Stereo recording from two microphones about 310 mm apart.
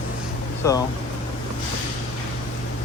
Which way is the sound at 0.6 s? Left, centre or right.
Centre.